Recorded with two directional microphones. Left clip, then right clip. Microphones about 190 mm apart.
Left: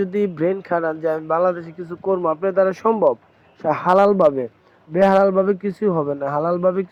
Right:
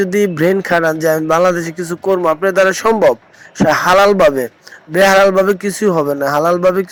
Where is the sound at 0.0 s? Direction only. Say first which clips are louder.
Right 7 dB; 15° right (ahead or behind).